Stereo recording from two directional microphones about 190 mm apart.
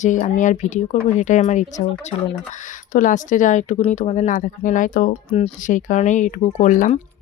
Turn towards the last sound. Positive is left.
turn(degrees=45)  # may be behind; listen again after turning